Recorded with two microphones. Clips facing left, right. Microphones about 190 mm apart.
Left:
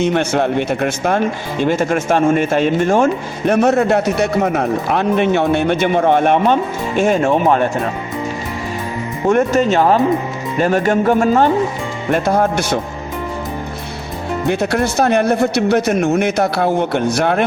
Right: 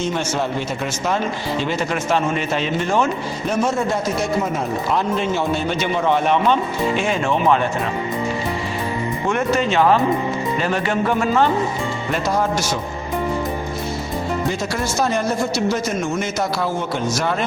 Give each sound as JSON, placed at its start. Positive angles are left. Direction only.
{"t": 0.0, "sound": "speech", "side_deg": 60}
{"t": 9.3, "sound": "music", "side_deg": 45}
{"t": 12.1, "sound": "speech", "side_deg": 55}
{"t": 14.4, "sound": "speech", "side_deg": 60}